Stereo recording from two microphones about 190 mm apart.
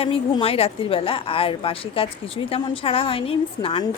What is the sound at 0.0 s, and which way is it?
A woman's voice, 30° left (ahead or behind).